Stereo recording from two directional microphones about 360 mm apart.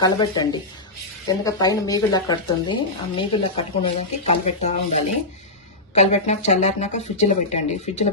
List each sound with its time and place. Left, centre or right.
0.0 s speech: centre